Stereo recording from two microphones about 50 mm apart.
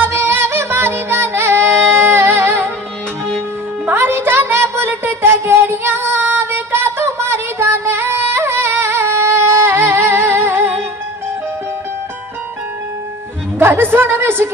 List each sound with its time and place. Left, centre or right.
0.0 s music: right
3.9 s music: right
13.6 s a woman's voice: right